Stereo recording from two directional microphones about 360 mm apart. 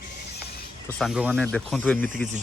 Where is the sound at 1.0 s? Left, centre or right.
Centre.